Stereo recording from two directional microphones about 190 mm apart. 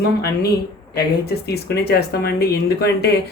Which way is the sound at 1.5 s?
55° left (ahead or behind).